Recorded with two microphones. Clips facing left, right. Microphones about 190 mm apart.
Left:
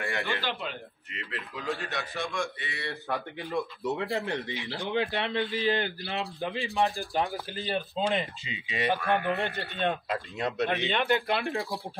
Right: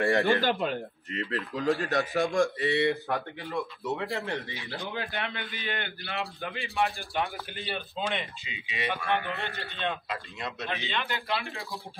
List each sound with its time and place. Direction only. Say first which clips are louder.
0.0 s a man's voice: right 8 dB; 35° right (ahead or behind)
2.8 s speech: right 3 dB; 15° right (ahead or behind)
4.1 s a man's voice: left 2 dB; 15° left (ahead or behind); by 9.0 s 35° left (ahead or behind)
9.0 s speech: left 2 dB; 5° left (ahead or behind)
9.8 s speech: left 4 dB; 45° left (ahead or behind)